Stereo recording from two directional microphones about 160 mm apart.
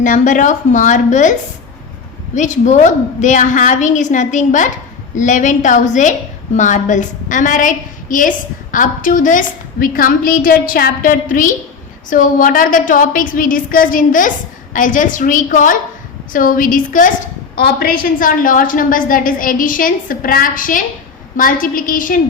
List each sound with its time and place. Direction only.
0.0 s a woman's voice: 55° left (ahead or behind)
17.5 s a woman's voice: 70° left (ahead or behind)